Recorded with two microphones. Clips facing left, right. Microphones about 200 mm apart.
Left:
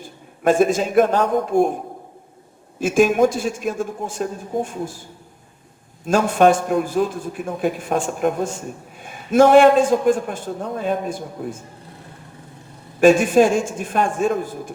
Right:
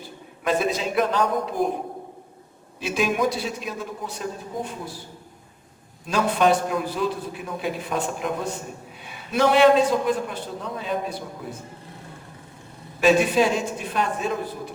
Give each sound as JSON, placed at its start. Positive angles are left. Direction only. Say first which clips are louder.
{"t": 0.0, "sound": "a man's voice", "louder": "left 8 dB", "side_deg": 50}
{"t": 2.7, "sound": "a man's voice", "louder": "left 8 dB", "side_deg": 50}
{"t": 6.1, "sound": "a man's voice", "louder": "left 5 dB", "side_deg": 50}
{"t": 13.0, "sound": "a man's voice", "louder": "left 5 dB", "side_deg": 50}